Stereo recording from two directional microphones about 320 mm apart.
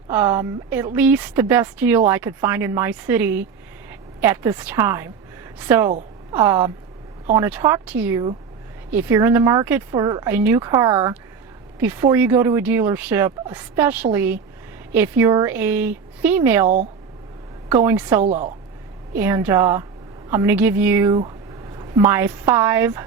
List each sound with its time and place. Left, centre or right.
0.1 s a woman's voice: centre
17.7 s speech: centre
18.2 s a woman's voice: right
19.1 s speech: centre